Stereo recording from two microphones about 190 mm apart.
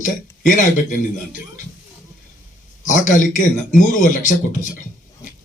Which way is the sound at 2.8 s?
40° left (ahead or behind).